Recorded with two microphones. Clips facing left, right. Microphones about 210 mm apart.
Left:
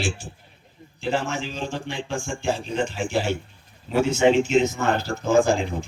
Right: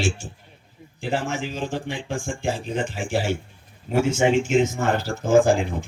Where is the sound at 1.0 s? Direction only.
55° right (ahead or behind).